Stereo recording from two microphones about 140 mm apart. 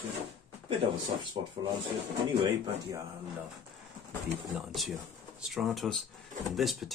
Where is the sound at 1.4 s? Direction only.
50° right (ahead or behind).